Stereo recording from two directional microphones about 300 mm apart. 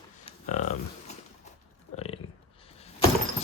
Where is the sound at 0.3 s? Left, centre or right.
Left.